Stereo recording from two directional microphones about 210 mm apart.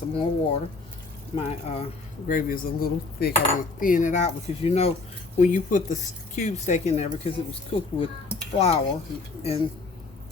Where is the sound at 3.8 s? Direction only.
40° left (ahead or behind).